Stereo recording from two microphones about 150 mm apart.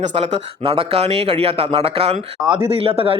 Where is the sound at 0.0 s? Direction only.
45° right (ahead or behind).